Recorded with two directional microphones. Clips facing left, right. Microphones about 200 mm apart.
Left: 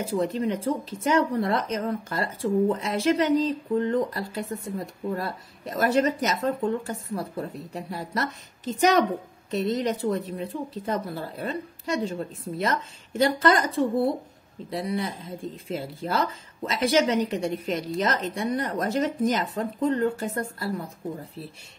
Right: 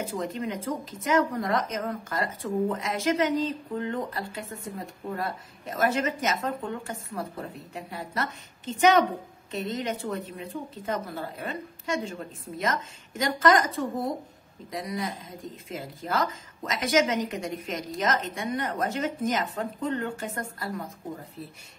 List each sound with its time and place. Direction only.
0.1 s speech: 35° left (ahead or behind)
14.7 s speech: 30° left (ahead or behind)